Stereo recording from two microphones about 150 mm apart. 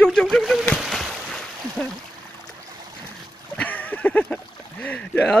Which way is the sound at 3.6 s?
10° left (ahead or behind).